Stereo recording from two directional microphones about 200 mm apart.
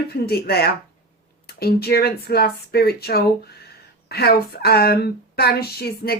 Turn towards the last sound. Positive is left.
turn(degrees=50)  # may be behind; listen again after turning